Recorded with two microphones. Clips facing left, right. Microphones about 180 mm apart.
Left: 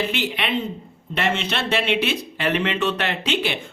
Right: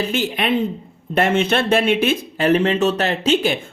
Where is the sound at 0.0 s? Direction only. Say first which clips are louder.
Right 4 dB; 45° right (ahead or behind).